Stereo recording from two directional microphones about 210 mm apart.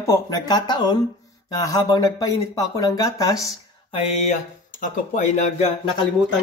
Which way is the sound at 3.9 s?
30° left (ahead or behind).